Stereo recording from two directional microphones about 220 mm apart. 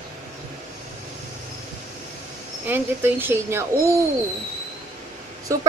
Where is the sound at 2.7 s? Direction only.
10° right (ahead or behind).